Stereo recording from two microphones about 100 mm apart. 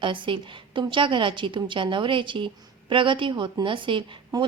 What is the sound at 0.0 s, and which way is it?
Speech, 55° right (ahead or behind).